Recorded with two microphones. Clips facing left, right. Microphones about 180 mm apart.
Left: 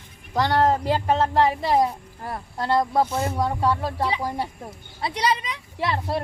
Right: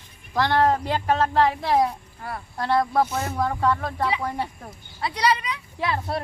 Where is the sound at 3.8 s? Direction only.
30° left (ahead or behind).